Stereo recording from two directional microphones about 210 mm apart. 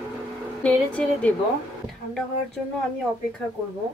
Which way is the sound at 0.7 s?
5° left (ahead or behind).